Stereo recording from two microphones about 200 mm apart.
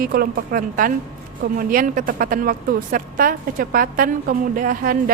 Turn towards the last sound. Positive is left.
turn(degrees=-45)  # may be behind; listen again after turning